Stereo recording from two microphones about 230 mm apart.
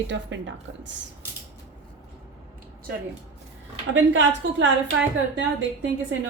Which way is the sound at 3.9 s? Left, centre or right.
Right.